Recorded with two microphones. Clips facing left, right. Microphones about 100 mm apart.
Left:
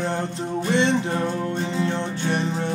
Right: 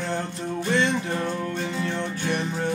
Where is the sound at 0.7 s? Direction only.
25° left (ahead or behind).